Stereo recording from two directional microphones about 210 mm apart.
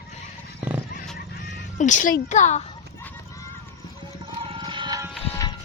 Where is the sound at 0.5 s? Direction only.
10° right (ahead or behind).